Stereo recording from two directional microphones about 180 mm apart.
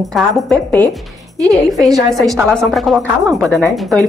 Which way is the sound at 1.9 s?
20° right (ahead or behind).